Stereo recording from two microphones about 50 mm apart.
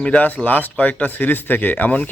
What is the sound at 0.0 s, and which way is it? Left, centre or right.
Speech, left.